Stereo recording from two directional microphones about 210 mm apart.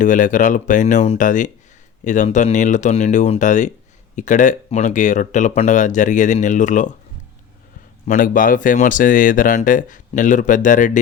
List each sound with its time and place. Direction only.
0.0 s speech: 40° left (ahead or behind)
8.0 s speech: 40° left (ahead or behind)